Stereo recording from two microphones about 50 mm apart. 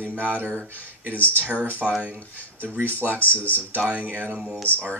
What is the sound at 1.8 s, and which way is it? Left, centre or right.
Speech, centre.